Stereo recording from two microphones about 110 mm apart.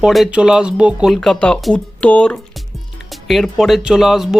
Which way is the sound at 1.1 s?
5° left (ahead or behind).